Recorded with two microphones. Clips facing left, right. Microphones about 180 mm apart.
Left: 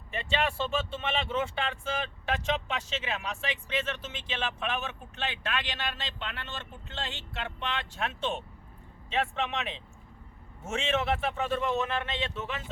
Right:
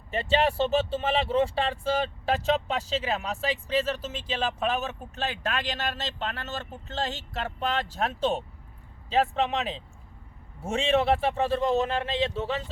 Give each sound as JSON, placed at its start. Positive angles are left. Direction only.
{"t": 0.1, "sound": "speech", "side_deg": -35}